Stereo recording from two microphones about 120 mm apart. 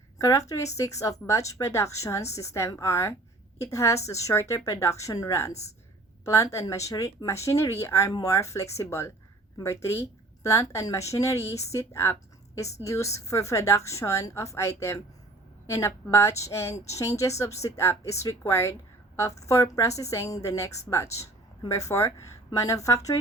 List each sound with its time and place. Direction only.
0.2 s speech: 30° left (ahead or behind)